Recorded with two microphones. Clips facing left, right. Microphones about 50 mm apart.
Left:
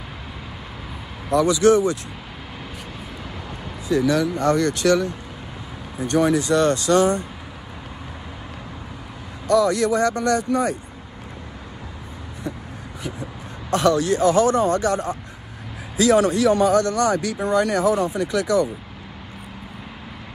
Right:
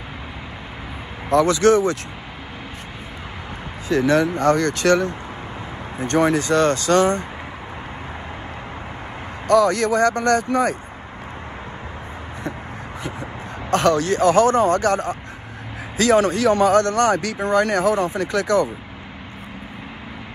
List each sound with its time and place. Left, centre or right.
1.3 s speech: right
3.9 s speech: right
9.5 s speech: right
13.0 s speech: right